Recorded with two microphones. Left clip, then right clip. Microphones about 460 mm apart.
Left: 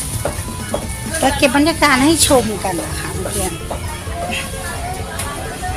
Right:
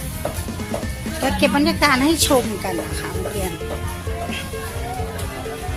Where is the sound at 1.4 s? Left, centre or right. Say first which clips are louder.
Left 2 dB; right.